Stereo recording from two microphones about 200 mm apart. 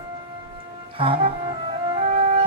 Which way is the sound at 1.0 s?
25° right (ahead or behind).